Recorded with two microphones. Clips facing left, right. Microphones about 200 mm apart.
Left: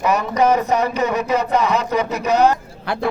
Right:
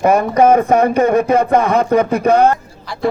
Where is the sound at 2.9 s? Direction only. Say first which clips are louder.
Left 6 dB; 60° left (ahead or behind).